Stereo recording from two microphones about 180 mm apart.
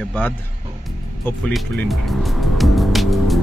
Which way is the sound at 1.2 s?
10° left (ahead or behind).